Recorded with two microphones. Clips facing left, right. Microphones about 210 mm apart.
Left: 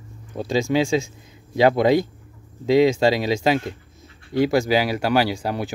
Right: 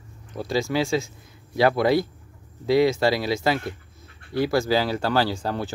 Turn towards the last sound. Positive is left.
turn(degrees=15)  # may be behind; listen again after turning